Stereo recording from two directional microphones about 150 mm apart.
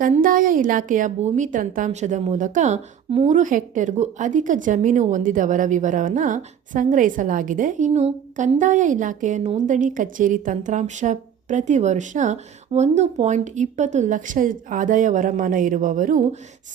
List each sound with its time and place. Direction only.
0.0 s speech: 65° right (ahead or behind); by 3.3 s 45° right (ahead or behind)
3.3 s speech: 60° right (ahead or behind)